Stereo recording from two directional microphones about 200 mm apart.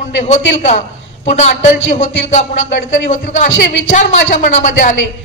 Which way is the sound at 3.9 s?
40° left (ahead or behind).